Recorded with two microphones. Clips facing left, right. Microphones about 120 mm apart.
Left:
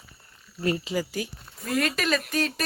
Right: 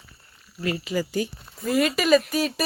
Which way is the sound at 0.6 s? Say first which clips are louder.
Left 1 dB; 35° left (ahead or behind).